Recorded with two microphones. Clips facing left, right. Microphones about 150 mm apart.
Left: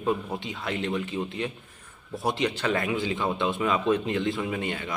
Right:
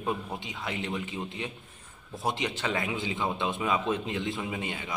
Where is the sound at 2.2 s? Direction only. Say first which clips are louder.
Left 4 dB; 20° right (ahead or behind).